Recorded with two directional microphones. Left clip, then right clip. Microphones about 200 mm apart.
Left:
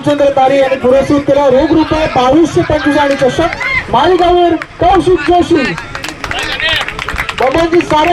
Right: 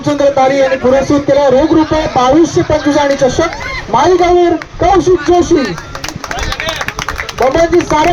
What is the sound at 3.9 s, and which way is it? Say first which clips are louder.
A man's voice: right 1 dB; 55° left (ahead or behind).